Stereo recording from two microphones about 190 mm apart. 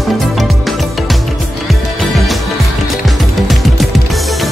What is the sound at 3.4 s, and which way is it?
Music, centre (ahead or behind).